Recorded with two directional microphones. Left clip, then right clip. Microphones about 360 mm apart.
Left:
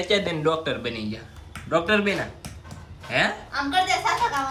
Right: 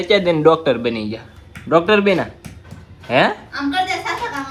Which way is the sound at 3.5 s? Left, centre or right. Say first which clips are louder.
Right 2 dB; left.